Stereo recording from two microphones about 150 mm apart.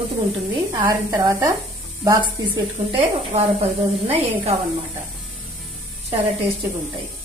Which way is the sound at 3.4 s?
45° right (ahead or behind).